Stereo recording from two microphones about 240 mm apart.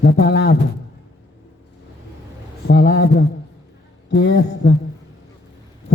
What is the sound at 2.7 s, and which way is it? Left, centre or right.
Speech, left.